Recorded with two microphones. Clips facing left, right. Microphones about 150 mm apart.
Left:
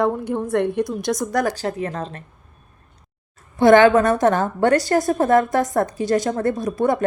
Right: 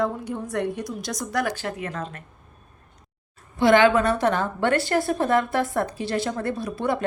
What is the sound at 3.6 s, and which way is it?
A woman's voice, 45° left (ahead or behind).